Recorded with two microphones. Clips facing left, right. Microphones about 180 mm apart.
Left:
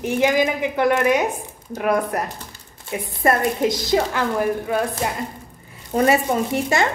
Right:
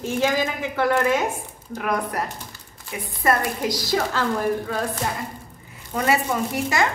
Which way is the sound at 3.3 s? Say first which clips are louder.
Left 3 dB; 25° left (ahead or behind).